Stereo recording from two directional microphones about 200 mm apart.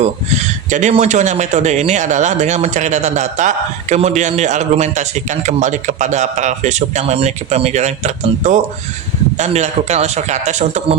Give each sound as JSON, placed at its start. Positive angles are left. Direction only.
{"t": 0.0, "sound": "speech", "side_deg": -35}